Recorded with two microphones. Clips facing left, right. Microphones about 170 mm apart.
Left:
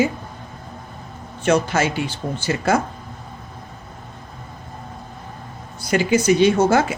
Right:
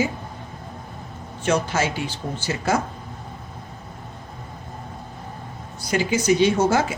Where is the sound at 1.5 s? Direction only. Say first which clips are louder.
Left 4 dB; 60° left (ahead or behind).